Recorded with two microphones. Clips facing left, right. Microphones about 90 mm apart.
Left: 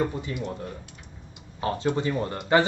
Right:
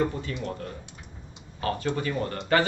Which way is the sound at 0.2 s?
15° left (ahead or behind).